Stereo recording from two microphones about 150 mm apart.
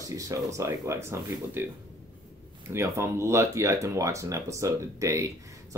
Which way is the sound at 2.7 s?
20° right (ahead or behind).